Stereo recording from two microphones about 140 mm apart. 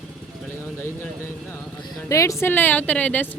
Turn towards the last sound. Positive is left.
turn(degrees=10)  # may be behind; listen again after turning